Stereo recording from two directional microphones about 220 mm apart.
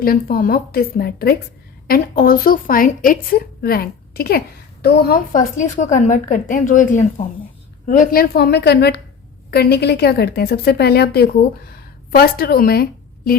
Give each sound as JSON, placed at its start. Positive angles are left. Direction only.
{"t": 0.0, "sound": "a woman's voice", "side_deg": 40}